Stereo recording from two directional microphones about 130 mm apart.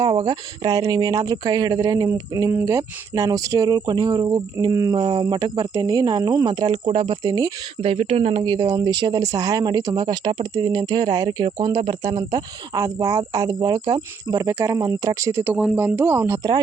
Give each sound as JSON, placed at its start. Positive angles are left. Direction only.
{"t": 0.0, "sound": "speech", "side_deg": -35}
{"t": 7.8, "sound": "speech", "side_deg": -50}